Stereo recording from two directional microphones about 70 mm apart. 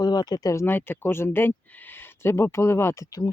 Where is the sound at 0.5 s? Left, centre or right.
Left.